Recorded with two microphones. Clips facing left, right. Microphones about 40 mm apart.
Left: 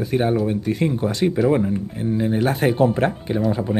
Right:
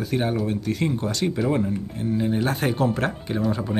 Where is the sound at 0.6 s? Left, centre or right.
Centre.